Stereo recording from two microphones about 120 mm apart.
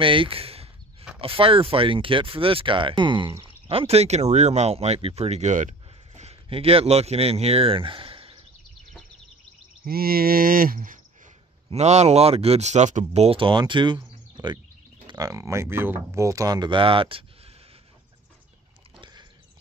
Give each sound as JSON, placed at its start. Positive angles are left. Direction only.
{"t": 0.0, "sound": "speech", "side_deg": -45}
{"t": 3.6, "sound": "speech", "side_deg": -55}
{"t": 11.7, "sound": "speech", "side_deg": -65}